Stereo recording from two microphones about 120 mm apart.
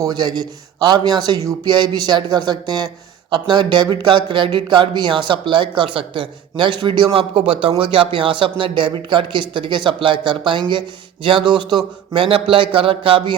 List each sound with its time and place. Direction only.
0.0 s a man's voice: 35° right (ahead or behind)